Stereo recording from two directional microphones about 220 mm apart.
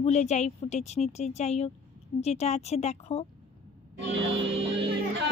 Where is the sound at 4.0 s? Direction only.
55° right (ahead or behind).